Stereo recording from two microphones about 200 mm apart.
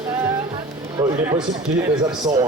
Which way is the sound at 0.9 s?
20° right (ahead or behind).